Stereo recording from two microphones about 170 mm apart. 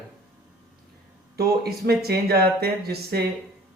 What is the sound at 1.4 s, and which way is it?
Speech, 65° right (ahead or behind).